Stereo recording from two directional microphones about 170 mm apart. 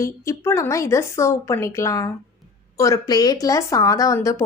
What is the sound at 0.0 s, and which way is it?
Speech, 20° left (ahead or behind).